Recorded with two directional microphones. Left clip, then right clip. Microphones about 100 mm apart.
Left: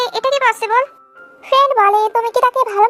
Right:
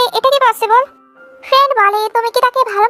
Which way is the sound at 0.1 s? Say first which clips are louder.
Right 4 dB; 35° right (ahead or behind).